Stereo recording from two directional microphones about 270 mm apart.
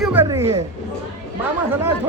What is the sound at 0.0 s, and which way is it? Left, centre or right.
Speech, centre.